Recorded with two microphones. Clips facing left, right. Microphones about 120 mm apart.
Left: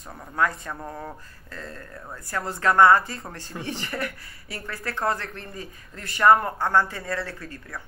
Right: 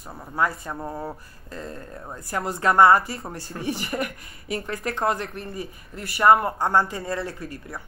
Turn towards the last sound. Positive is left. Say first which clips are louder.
# right 3 dB
turn(degrees=-15)  # may be behind; listen again after turning